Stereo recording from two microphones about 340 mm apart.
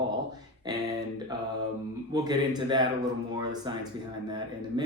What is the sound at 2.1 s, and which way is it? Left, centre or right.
Speech, centre.